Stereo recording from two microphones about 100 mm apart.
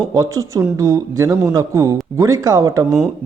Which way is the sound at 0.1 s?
35° right (ahead or behind).